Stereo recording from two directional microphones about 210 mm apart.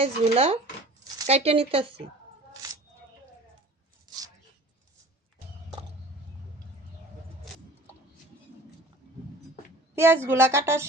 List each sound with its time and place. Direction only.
0.0 s speech: 30° right (ahead or behind)
4.1 s a sound: 20° right (ahead or behind)
9.9 s speech: 10° right (ahead or behind)